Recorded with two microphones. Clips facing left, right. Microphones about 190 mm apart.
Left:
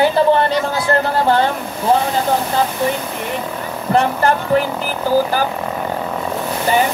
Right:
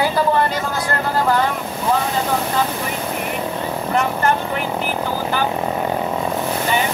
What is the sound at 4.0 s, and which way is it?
Speech, 35° left (ahead or behind).